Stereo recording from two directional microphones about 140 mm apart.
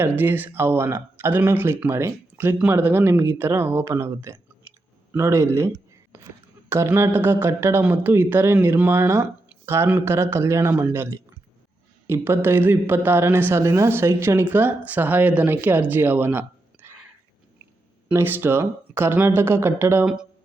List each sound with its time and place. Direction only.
0.0 s a woman's voice: 15° right (ahead or behind)
18.1 s a woman's voice: 15° right (ahead or behind)